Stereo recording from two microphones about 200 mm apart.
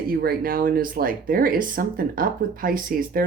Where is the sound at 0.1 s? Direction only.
50° right (ahead or behind).